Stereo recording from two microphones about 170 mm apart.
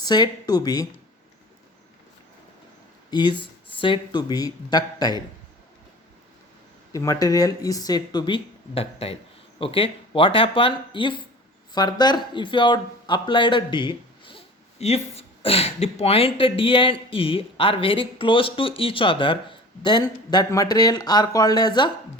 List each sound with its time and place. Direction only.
0.0 s speech: 25° left (ahead or behind)
3.1 s speech: 25° left (ahead or behind)
6.9 s speech: 20° left (ahead or behind)